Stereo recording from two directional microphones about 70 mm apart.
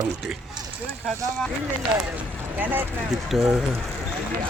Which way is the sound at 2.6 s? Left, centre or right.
Right.